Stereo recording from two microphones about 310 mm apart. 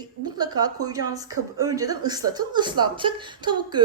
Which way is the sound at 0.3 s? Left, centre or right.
Centre.